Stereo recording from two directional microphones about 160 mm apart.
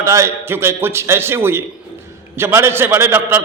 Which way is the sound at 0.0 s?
15° right (ahead or behind).